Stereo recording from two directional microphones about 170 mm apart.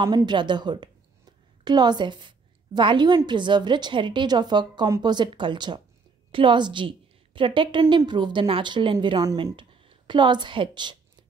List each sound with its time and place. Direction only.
0.0 s a woman's voice: 25° right (ahead or behind)